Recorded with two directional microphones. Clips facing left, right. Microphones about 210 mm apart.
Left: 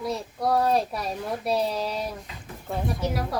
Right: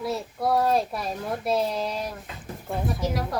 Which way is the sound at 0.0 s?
Centre (ahead or behind).